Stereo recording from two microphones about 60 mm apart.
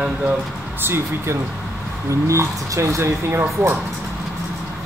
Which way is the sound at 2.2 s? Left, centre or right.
Right.